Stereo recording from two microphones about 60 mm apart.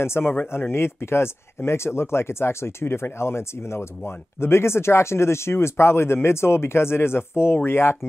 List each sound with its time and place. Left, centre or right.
0.0 s speech: left